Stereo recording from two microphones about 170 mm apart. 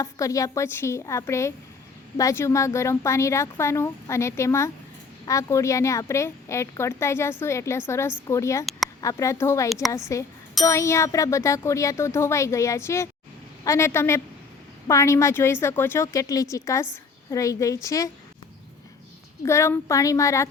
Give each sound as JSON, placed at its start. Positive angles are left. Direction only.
{"t": 0.0, "sound": "a woman's voice", "side_deg": 20}
{"t": 19.4, "sound": "a woman's voice", "side_deg": 15}